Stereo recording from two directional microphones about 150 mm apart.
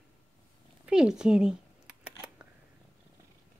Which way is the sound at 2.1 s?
10° right (ahead or behind).